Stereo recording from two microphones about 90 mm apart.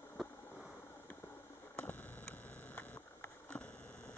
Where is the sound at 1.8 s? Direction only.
15° left (ahead or behind).